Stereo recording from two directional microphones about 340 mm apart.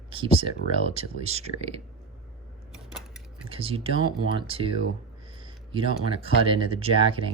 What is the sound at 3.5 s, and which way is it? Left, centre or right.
Speech, centre.